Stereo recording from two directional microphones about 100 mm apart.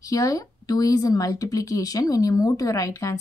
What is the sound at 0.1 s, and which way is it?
Speech, 35° left (ahead or behind).